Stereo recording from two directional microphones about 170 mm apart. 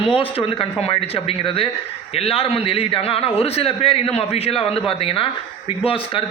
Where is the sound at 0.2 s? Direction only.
30° left (ahead or behind).